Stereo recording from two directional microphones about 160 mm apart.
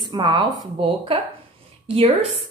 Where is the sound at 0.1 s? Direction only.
30° right (ahead or behind).